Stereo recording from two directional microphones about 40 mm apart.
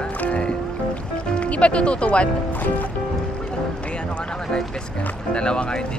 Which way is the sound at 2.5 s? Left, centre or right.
Left.